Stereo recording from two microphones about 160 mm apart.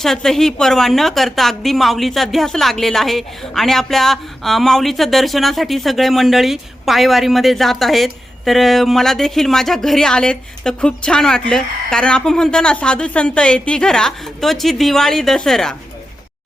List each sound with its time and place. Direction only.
0.0 s a woman's voice: centre (ahead or behind)